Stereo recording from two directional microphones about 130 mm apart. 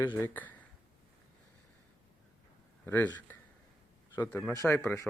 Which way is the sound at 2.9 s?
15° left (ahead or behind).